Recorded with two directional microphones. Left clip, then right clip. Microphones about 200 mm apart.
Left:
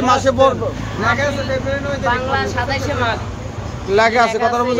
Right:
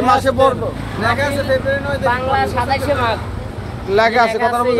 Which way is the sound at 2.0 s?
30° right (ahead or behind).